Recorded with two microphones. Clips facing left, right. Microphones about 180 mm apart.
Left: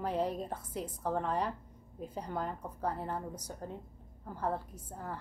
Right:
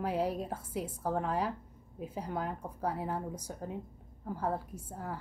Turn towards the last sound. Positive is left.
turn(degrees=-5)  # may be behind; listen again after turning